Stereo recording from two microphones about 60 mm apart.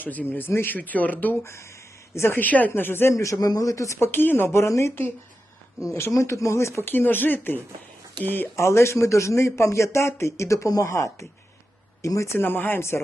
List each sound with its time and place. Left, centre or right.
0.0 s speech: left
1.5 s a sound: left
2.4 s a woman's voice: left
3.1 s a man's voice: left
4.0 s speech: left
6.9 s a woman's voice: left
8.5 s a man's voice: left
12.4 s a woman's voice: left